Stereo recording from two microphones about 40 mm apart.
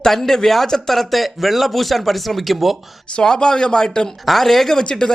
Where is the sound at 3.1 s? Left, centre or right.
Centre.